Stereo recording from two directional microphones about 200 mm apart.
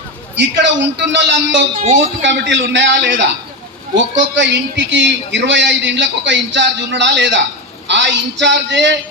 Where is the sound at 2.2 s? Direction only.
60° right (ahead or behind).